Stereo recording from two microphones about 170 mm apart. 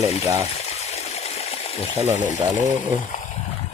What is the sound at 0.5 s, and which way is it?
Water, 40° left (ahead or behind).